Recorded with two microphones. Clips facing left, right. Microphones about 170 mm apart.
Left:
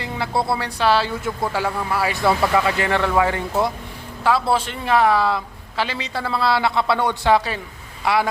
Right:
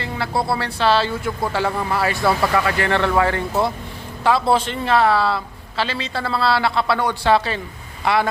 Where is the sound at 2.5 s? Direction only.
15° left (ahead or behind).